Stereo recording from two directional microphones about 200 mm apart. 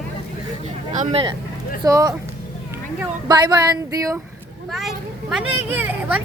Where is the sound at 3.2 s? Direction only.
20° right (ahead or behind).